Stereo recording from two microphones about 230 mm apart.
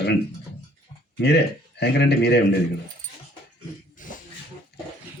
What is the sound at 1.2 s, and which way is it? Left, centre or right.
Speech, left.